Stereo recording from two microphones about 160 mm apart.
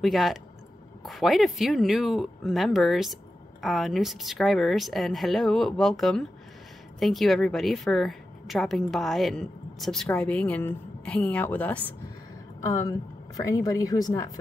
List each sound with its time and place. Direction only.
0.0 s a woman's voice: centre (ahead or behind); by 14.4 s 20° left (ahead or behind)